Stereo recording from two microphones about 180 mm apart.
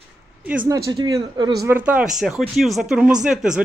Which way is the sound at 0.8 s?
20° right (ahead or behind).